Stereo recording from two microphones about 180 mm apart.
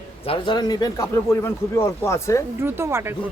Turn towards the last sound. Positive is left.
turn(degrees=-15)  # may be behind; listen again after turning